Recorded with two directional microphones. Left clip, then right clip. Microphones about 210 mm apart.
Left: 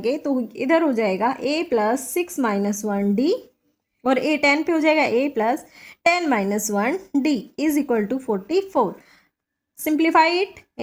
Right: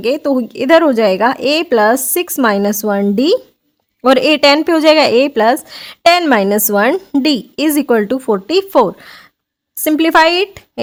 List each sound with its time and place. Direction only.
0.0 s speech: 40° right (ahead or behind)